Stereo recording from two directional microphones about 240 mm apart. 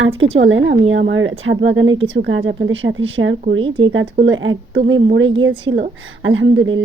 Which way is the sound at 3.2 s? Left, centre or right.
Right.